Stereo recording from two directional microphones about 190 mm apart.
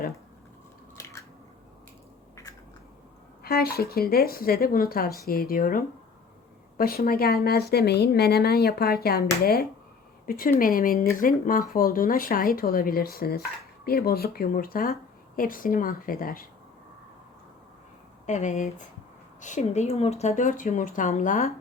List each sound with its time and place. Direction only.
2.3 s a sound: 20° left (ahead or behind)
3.4 s speech: 55° left (ahead or behind)
18.3 s speech: 40° left (ahead or behind)